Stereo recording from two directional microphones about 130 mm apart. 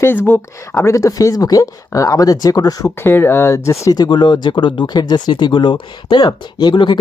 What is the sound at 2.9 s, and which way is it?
Speech, 15° left (ahead or behind).